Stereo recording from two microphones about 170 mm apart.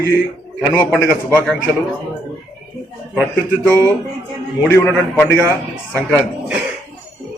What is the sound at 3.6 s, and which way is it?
Speech, 10° left (ahead or behind).